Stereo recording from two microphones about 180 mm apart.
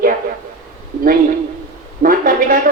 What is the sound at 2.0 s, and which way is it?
Speech, 50° right (ahead or behind).